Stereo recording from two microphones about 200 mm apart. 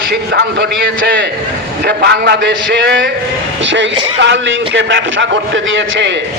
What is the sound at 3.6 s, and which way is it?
A man's voice, 65° right (ahead or behind).